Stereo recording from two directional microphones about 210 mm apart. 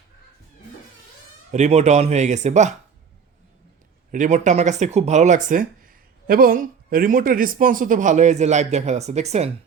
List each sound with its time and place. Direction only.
1.5 s speech: 35° right (ahead or behind)
4.1 s speech: 35° right (ahead or behind)